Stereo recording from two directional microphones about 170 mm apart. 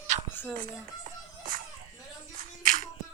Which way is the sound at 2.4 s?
50° right (ahead or behind).